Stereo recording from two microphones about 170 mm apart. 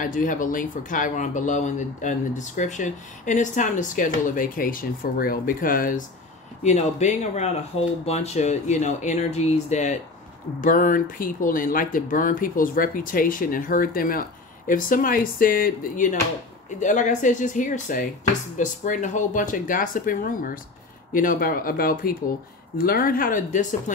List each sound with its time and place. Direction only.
0.0 s speech: 50° left (ahead or behind)
6.6 s speech: 45° left (ahead or behind)
10.6 s speech: 55° left (ahead or behind)